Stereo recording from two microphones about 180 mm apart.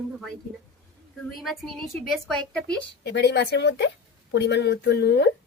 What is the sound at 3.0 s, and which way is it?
Speech, 70° left (ahead or behind).